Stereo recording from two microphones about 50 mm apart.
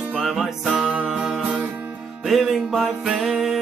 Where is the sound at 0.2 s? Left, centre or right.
Centre.